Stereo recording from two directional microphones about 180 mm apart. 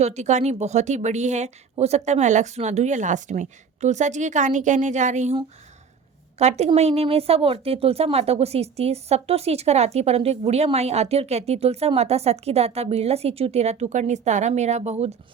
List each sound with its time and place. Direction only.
0.0 s a woman's voice: 40° right (ahead or behind)
6.4 s speech: 35° right (ahead or behind)